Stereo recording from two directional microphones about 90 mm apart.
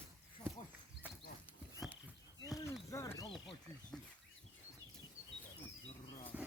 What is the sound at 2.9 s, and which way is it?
Speech, 35° left (ahead or behind).